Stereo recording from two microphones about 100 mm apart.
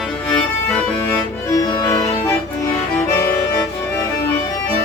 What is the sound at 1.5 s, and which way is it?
Music, 40° left (ahead or behind).